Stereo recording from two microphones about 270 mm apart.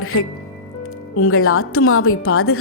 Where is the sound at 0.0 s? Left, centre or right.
Left.